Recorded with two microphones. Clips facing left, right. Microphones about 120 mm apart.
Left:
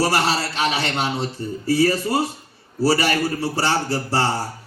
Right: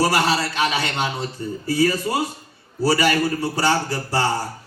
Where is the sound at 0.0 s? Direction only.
30° left (ahead or behind).